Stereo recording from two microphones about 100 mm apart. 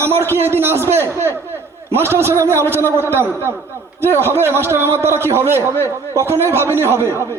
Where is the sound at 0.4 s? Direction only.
25° right (ahead or behind).